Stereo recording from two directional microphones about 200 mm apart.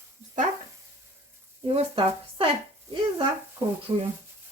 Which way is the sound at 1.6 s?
25° right (ahead or behind).